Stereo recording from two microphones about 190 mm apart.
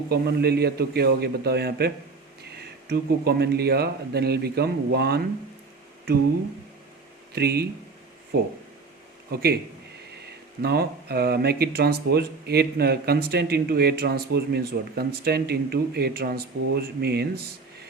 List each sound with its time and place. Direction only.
0.1 s speech: 55° right (ahead or behind)
2.9 s speech: 60° right (ahead or behind)
7.3 s speech: 55° right (ahead or behind)
9.3 s speech: 55° right (ahead or behind)
10.6 s speech: 55° right (ahead or behind)